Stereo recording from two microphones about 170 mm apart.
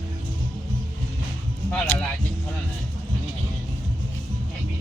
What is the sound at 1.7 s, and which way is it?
Speech, 5° left (ahead or behind).